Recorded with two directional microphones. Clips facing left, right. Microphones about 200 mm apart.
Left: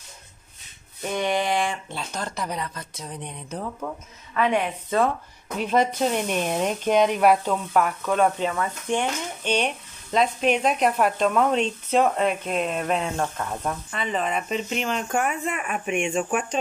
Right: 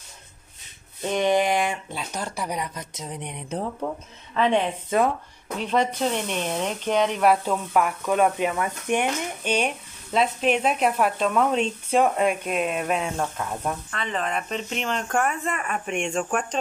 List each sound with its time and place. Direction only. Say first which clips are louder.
1.0 s a woman's voice: right 3 dB; 20° right (ahead or behind)
5.6 s speech: left 2 dB; 10° left (ahead or behind)
7.2 s speech: left 1 dB; 5° right (ahead or behind)